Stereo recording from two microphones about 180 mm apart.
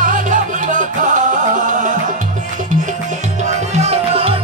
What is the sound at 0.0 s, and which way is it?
Music, 45° right (ahead or behind).